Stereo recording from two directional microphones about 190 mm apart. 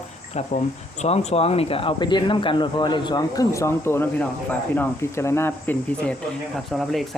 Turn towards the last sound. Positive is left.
turn(degrees=0)  # may be behind; listen again after turning